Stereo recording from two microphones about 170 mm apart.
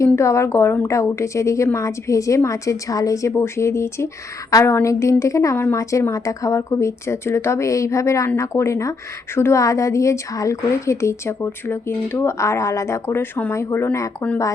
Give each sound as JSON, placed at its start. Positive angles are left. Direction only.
{"t": 0.0, "sound": "a woman's voice", "side_deg": 15}